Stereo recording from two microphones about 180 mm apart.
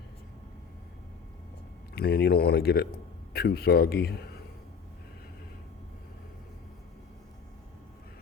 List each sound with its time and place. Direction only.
2.0 s speech: 60° left (ahead or behind)